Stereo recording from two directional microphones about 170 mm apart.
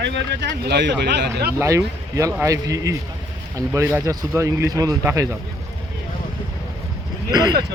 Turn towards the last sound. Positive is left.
turn(degrees=-25)  # may be behind; listen again after turning